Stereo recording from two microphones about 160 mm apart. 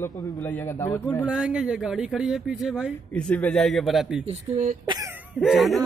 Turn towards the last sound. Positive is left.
turn(degrees=0)  # may be behind; listen again after turning